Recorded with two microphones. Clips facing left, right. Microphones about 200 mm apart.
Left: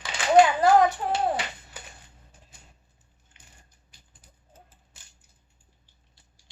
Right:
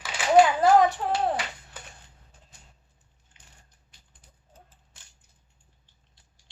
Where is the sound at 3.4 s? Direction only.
60° left (ahead or behind).